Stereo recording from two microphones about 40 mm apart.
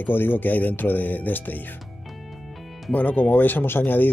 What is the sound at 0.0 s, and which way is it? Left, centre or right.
Speech, left.